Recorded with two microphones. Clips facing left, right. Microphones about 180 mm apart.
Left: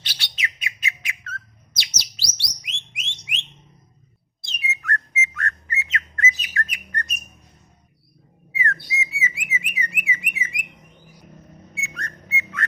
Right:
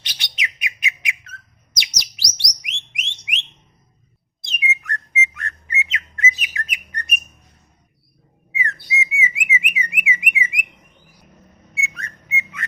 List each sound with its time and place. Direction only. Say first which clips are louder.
0.0 s bird: right 1 dB; 20° right (ahead or behind)
3.0 s alarm: right 4 dB; 15° right (ahead or behind)
4.4 s whistle: right 1 dB; 20° right (ahead or behind)
8.5 s bird: right 1 dB; 15° right (ahead or behind)
11.7 s whistle: right 3 dB; 5° right (ahead or behind)
12.3 s whistling: even; 15° right (ahead or behind)